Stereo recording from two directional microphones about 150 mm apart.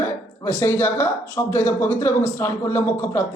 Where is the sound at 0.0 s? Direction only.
15° left (ahead or behind).